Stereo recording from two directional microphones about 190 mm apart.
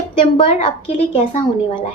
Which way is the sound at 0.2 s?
30° left (ahead or behind).